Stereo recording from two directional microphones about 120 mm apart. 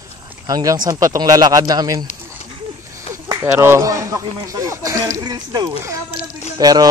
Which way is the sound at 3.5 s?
20° right (ahead or behind).